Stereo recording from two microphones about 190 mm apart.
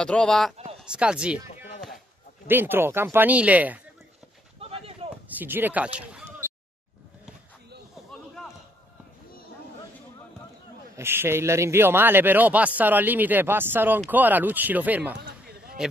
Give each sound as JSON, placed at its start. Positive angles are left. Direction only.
{"t": 0.0, "sound": "speech", "side_deg": 5}
{"t": 2.4, "sound": "a man's voice", "side_deg": -10}
{"t": 4.6, "sound": "a sound", "side_deg": -30}
{"t": 5.3, "sound": "speech", "side_deg": -10}
{"t": 11.0, "sound": "a man's voice", "side_deg": -10}
{"t": 15.1, "sound": "a sound", "side_deg": -50}